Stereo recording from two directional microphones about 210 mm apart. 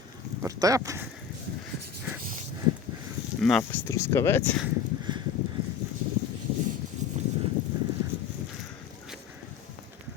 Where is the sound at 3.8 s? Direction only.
15° left (ahead or behind).